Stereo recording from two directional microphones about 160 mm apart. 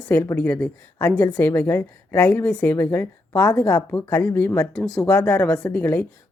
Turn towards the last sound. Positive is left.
turn(degrees=10)  # may be behind; listen again after turning